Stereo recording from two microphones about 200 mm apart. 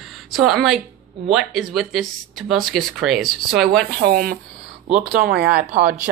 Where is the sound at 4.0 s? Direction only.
50° right (ahead or behind).